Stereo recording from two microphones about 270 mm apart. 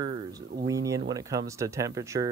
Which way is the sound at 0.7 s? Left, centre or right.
Centre.